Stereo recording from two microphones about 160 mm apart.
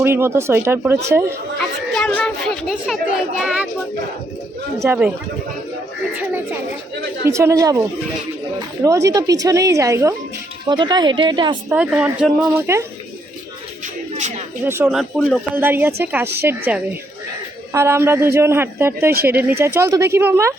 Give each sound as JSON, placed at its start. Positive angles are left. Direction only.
{"t": 0.0, "sound": "a man's voice", "side_deg": -15}
{"t": 1.9, "sound": "speech", "side_deg": 5}
{"t": 4.8, "sound": "a man's voice", "side_deg": -10}
{"t": 7.3, "sound": "speech", "side_deg": -20}
{"t": 11.7, "sound": "a man's voice", "side_deg": -10}
{"t": 14.2, "sound": "a sound", "side_deg": -50}
{"t": 14.6, "sound": "a man's voice", "side_deg": -15}
{"t": 14.9, "sound": "speech", "side_deg": 0}
{"t": 15.5, "sound": "a man's voice", "side_deg": -15}